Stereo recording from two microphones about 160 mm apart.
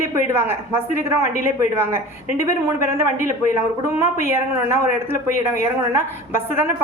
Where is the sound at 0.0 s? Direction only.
15° right (ahead or behind).